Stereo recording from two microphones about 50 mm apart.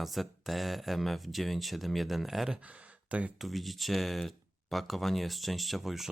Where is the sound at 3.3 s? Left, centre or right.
Centre.